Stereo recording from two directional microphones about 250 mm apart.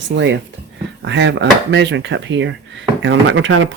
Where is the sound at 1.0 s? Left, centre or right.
Right.